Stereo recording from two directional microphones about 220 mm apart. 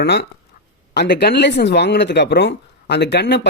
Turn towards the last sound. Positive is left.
turn(degrees=50)  # may be behind; listen again after turning